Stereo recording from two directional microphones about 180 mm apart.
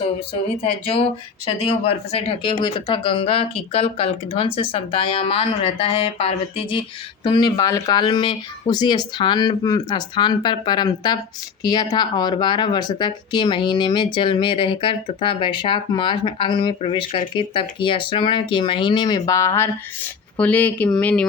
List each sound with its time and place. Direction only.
0.6 s speech: 30° left (ahead or behind)
2.1 s speech: 30° left (ahead or behind); by 21.2 s 5° left (ahead or behind)